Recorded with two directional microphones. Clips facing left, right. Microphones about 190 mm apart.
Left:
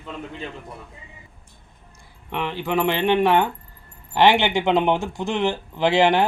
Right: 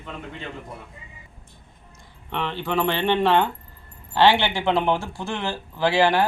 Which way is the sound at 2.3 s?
10° left (ahead or behind).